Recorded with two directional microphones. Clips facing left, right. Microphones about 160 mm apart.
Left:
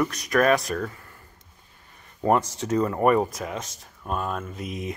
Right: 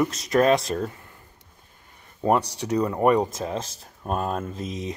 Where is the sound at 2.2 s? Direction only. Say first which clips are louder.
Even; 15° right (ahead or behind); by 4.6 s 35° right (ahead or behind).